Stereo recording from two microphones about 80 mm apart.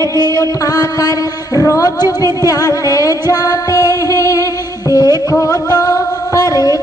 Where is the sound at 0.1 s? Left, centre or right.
Left.